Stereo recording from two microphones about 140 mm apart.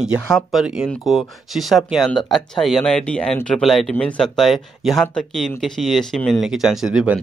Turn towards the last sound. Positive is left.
turn(degrees=-5)  # may be behind; listen again after turning